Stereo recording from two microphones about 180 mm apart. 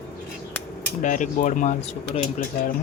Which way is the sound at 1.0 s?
45° left (ahead or behind).